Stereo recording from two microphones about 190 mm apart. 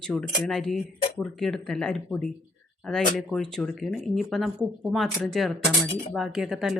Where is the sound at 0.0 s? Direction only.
Centre (ahead or behind).